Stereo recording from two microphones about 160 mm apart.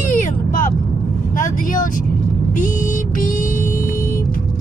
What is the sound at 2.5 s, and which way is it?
Music, 55° left (ahead or behind).